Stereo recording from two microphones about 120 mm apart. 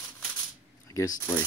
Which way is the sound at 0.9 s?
30° left (ahead or behind).